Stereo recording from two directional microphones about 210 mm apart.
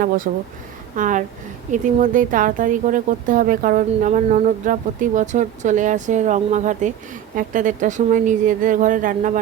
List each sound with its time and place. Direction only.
0.3 s speech: 40° right (ahead or behind)